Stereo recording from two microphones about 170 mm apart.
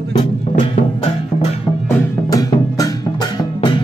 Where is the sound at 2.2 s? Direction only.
20° left (ahead or behind).